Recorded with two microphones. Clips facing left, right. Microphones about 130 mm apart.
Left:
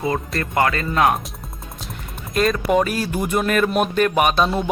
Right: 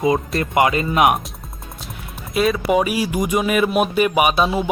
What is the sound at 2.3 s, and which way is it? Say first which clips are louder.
Speech: right 1 dB; 5° right (ahead or behind).